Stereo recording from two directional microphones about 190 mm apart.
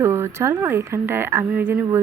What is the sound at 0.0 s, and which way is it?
A woman's voice, 10° right (ahead or behind).